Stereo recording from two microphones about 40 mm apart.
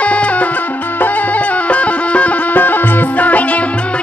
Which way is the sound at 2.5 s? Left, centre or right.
Left.